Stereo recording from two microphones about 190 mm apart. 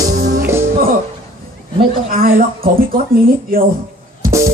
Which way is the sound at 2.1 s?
50° right (ahead or behind).